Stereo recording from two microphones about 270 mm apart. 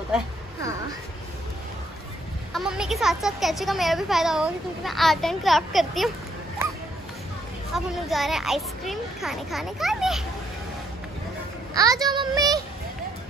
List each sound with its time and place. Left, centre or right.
0.1 s a sound: centre
2.5 s speech: centre
7.7 s speech: centre
11.7 s speech: centre